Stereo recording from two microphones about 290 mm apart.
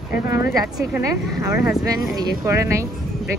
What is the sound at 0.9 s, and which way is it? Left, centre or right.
Speech, centre.